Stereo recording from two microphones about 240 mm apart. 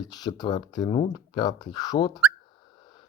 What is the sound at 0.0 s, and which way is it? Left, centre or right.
Speech, centre.